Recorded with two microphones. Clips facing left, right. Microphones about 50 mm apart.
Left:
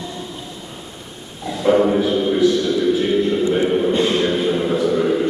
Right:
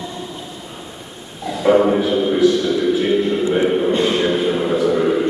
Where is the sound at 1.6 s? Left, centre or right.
Centre.